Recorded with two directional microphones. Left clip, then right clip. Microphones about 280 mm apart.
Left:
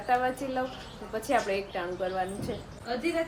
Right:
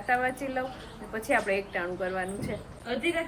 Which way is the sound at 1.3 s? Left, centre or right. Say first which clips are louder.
Right 1 dB; centre.